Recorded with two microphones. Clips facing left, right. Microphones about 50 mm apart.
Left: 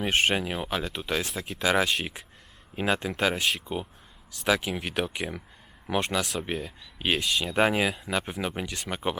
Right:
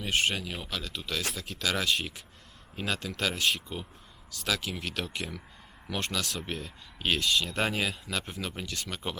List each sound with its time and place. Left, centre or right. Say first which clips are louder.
0.0 s speech: left 4 dB; left